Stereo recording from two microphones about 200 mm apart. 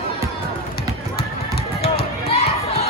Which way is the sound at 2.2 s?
30° left (ahead or behind).